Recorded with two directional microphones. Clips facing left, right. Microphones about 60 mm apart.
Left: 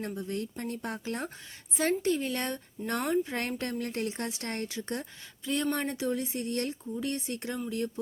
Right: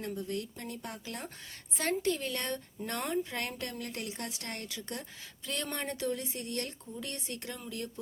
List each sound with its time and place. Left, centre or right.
0.1 s speech: left
1.8 s speech: centre
5.4 s a woman's voice: centre
6.1 s speech: left